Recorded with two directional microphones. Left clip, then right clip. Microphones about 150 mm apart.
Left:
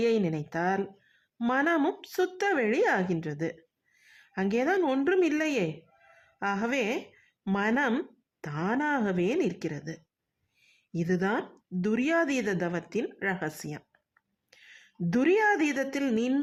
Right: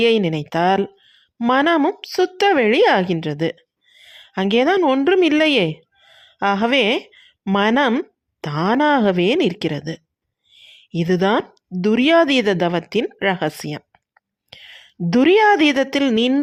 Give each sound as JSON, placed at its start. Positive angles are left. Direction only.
{"t": 0.0, "sound": "a woman's voice", "side_deg": -40}
{"t": 3.9, "sound": "a sound", "side_deg": -45}
{"t": 4.8, "sound": "speech", "side_deg": -35}
{"t": 14.5, "sound": "whispering", "side_deg": -45}
{"t": 15.0, "sound": "speech", "side_deg": -40}